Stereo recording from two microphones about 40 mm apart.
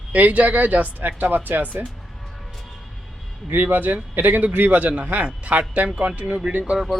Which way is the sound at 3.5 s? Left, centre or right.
Right.